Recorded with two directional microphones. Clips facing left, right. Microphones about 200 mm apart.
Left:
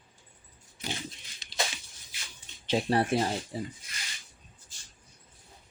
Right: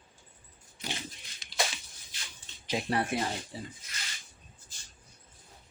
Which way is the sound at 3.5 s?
45° left (ahead or behind).